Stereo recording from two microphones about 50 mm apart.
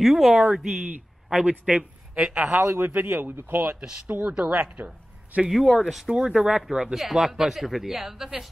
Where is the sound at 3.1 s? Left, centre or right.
Right.